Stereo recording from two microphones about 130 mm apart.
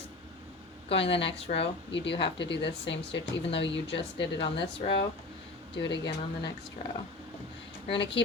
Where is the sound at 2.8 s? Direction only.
45° left (ahead or behind).